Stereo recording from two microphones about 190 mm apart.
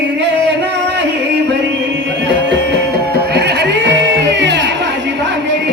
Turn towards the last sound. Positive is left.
turn(degrees=-65)  # may be behind; listen again after turning